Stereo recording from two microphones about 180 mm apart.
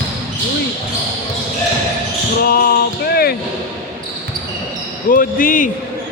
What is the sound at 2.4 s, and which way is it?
Basketball bounce, 55° left (ahead or behind).